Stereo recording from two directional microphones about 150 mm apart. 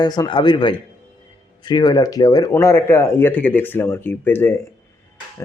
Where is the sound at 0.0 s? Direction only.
25° left (ahead or behind).